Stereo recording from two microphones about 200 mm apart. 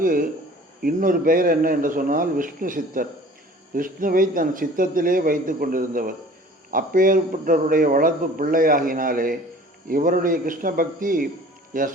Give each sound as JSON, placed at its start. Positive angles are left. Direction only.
{"t": 0.0, "sound": "speech", "side_deg": -45}